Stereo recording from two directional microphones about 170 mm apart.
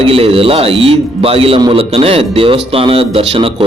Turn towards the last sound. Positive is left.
turn(degrees=-35)  # may be behind; listen again after turning